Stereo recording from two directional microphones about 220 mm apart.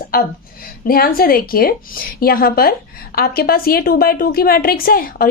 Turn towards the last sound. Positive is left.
turn(degrees=40)  # may be behind; listen again after turning